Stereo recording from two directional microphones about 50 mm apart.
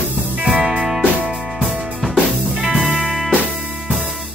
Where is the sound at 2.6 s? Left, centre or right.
Centre.